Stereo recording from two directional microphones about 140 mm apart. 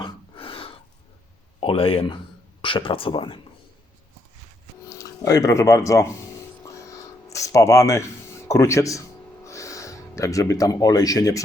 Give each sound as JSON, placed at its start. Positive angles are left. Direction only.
{"t": 0.0, "sound": "gasp", "side_deg": 40}
{"t": 1.6, "sound": "speech", "side_deg": 40}
{"t": 4.9, "sound": "speech", "side_deg": 25}
{"t": 6.6, "sound": "a sound", "side_deg": 20}